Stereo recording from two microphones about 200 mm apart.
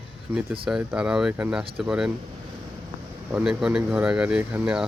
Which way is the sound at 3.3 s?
5° right (ahead or behind).